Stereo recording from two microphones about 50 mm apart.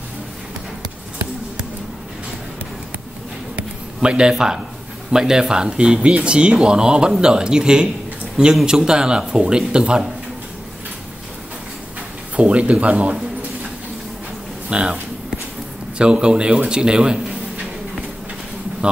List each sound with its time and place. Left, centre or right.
3.5 s a sound: centre
5.1 s speech: centre
12.4 s a man's voice: right
14.7 s speech: right
16.0 s a man's voice: centre